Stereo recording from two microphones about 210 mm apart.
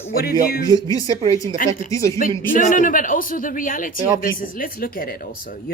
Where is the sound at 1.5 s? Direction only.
40° left (ahead or behind).